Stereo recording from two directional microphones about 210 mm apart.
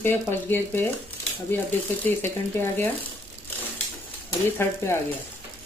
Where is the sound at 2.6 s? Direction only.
10° left (ahead or behind).